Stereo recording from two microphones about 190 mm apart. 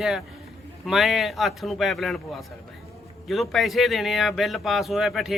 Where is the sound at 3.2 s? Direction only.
Centre (ahead or behind).